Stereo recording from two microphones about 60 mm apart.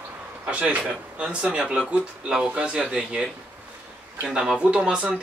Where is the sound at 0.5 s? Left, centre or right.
Right.